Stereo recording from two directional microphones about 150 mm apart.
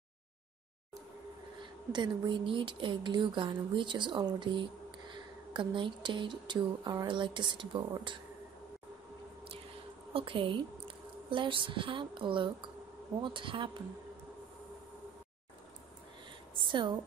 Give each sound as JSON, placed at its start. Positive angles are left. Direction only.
{"t": 1.9, "sound": "speech", "side_deg": -30}
{"t": 10.1, "sound": "speech", "side_deg": -35}
{"t": 16.5, "sound": "a sound", "side_deg": -30}